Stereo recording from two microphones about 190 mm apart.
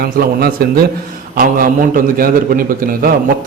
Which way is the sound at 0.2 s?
55° right (ahead or behind).